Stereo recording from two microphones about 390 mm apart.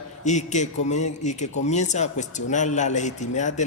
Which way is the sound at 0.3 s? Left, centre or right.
Centre.